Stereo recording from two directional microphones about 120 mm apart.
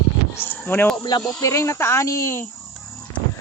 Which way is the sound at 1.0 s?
35° left (ahead or behind).